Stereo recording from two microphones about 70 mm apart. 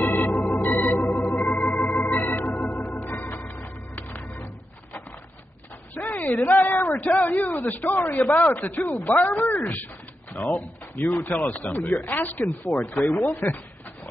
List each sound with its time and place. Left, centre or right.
0.0 s organ: left
4.2 s music: left
5.9 s a sound: left
6.3 s speech: left
6.7 s a sound: left
7.4 s speech: left